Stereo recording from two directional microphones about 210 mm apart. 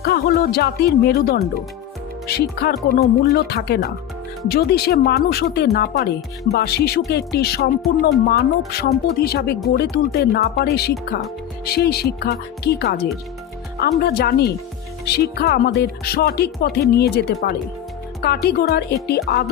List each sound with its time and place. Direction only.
0.0 s music: 50° left (ahead or behind)